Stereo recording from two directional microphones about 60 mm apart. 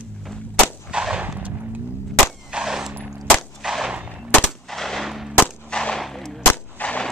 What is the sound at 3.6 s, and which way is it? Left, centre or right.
Gunshot, centre.